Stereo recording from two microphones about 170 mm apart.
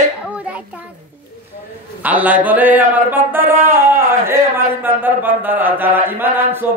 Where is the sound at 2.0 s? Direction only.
10° right (ahead or behind).